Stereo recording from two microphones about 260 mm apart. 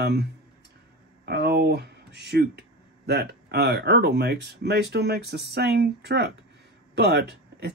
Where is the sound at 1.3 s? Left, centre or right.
Right.